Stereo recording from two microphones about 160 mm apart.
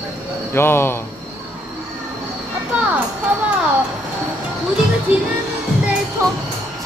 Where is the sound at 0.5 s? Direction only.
15° left (ahead or behind).